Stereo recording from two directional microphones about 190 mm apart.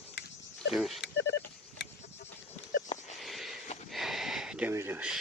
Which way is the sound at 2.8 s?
40° left (ahead or behind).